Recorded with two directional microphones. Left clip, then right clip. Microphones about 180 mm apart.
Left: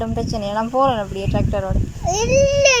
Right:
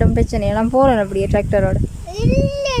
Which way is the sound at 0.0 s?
25° right (ahead or behind).